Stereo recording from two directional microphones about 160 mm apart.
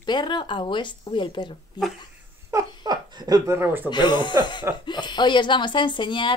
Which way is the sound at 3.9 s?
30° left (ahead or behind).